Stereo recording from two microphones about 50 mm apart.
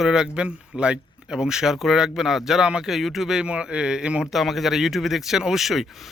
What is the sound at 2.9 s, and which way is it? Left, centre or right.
Speech, centre.